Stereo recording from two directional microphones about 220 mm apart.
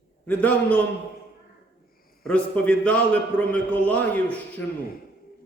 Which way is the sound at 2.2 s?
5° left (ahead or behind).